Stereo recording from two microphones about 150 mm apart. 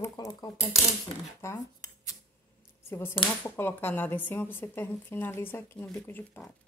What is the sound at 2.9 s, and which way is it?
Speech, 15° left (ahead or behind).